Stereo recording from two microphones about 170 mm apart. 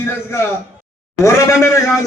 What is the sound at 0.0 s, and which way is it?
A man's voice, 15° left (ahead or behind).